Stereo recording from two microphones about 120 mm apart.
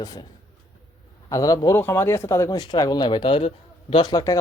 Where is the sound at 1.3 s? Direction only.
25° left (ahead or behind); by 4.0 s 50° left (ahead or behind).